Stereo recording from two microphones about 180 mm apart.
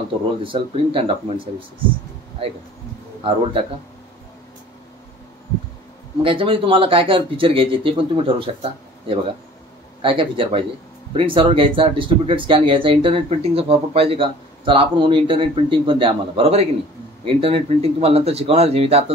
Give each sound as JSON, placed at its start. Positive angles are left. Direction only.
{"t": 0.4, "sound": "speech", "side_deg": -30}
{"t": 6.2, "sound": "speech", "side_deg": -30}